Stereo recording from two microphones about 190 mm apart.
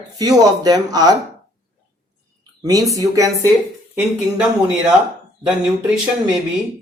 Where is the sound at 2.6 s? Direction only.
20° right (ahead or behind).